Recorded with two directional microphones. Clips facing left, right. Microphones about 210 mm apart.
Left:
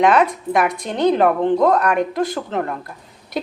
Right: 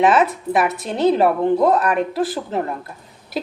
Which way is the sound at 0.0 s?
5° right (ahead or behind).